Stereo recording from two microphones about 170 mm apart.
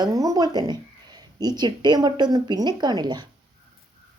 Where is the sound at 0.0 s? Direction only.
20° right (ahead or behind).